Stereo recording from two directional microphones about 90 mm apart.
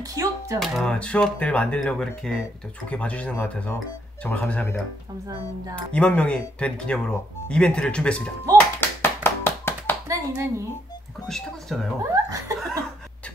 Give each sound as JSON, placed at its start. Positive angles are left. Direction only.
{"t": 0.0, "sound": "a sound", "side_deg": -40}
{"t": 0.6, "sound": "speech", "side_deg": 0}
{"t": 0.9, "sound": "speech", "side_deg": 10}
{"t": 5.8, "sound": "speech", "side_deg": 15}
{"t": 9.0, "sound": "clapping", "side_deg": 25}
{"t": 10.0, "sound": "clapping", "side_deg": -30}
{"t": 11.2, "sound": "speech", "side_deg": 0}
{"t": 12.0, "sound": "speech", "side_deg": -35}